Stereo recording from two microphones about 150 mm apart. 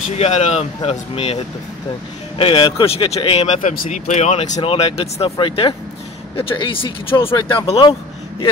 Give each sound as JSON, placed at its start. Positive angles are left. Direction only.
{"t": 0.1, "sound": "speech", "side_deg": 45}